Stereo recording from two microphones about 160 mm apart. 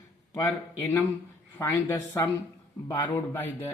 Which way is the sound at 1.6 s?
10° left (ahead or behind).